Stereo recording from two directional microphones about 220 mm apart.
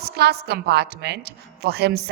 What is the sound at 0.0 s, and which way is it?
A man's voice, 45° right (ahead or behind).